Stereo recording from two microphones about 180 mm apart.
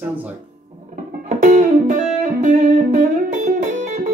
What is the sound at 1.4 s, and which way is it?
Music, 45° right (ahead or behind).